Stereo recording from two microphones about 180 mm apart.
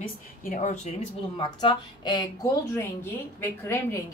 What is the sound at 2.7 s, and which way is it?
A woman's voice, 15° left (ahead or behind).